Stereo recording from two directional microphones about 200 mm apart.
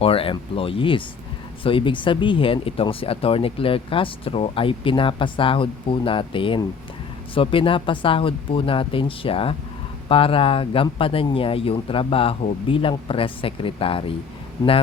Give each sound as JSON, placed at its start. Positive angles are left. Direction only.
{"t": 0.0, "sound": "speech", "side_deg": 30}